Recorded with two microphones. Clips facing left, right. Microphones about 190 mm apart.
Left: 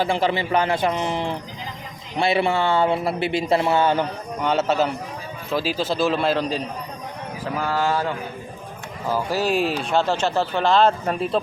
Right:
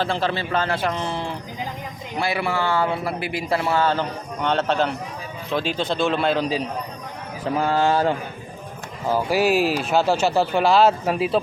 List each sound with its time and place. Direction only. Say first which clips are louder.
0.0 s a man's voice: left 2 dB; 15° left (ahead or behind)
4.4 s a man's voice: left 1 dB; 5° left (ahead or behind)
7.6 s a man's voice: right 3 dB; 25° right (ahead or behind)
9.1 s speech: right 3 dB; 10° right (ahead or behind)